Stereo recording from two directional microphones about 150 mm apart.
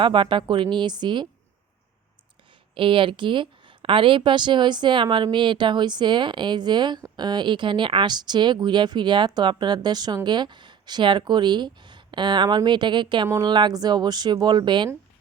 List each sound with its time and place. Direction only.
0.0 s a woman's voice: 35° right (ahead or behind)
2.7 s a woman's voice: 35° right (ahead or behind)